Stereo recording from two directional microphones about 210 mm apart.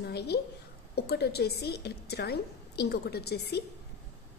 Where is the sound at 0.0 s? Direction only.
50° left (ahead or behind).